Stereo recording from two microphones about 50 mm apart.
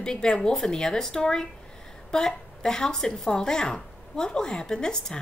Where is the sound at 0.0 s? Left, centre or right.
Centre.